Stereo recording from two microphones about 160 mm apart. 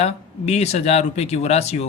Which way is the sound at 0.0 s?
40° left (ahead or behind).